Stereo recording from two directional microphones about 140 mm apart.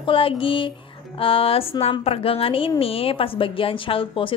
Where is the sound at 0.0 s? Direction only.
40° left (ahead or behind).